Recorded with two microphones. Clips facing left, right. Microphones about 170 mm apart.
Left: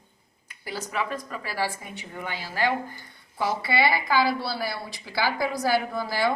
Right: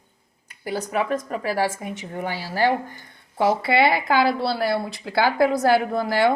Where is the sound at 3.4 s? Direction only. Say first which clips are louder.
Right 6 dB; 55° right (ahead or behind).